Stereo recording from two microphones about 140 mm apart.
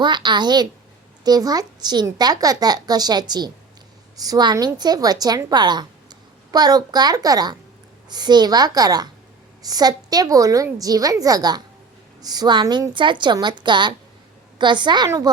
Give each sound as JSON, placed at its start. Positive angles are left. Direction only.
{"t": 0.0, "sound": "a woman's voice", "side_deg": -35}